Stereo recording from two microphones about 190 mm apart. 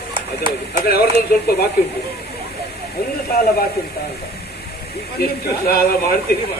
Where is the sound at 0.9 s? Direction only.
55° left (ahead or behind).